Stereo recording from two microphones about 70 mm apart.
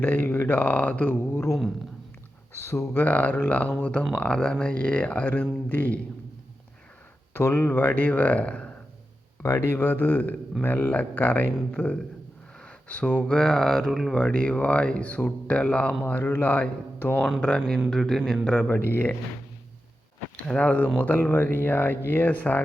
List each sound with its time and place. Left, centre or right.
0.0 s speech: left
3.0 s speech: left
7.3 s speech: left; by 8.7 s centre
9.4 s speech: left
13.3 s speech: centre; by 17.2 s left
17.5 s speech: centre
18.7 s speech: left
20.7 s speech: left